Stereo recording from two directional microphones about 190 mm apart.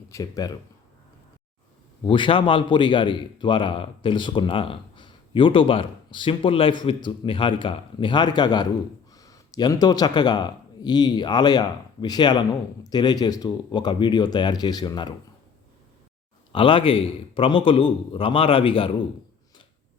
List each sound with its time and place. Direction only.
0.1 s a man's voice: 20° left (ahead or behind)
2.0 s a man's voice: 25° left (ahead or behind)
16.5 s a man's voice: 30° left (ahead or behind)